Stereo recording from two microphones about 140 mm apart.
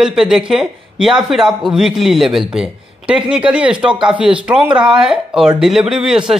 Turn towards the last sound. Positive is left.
turn(degrees=-5)  # may be behind; listen again after turning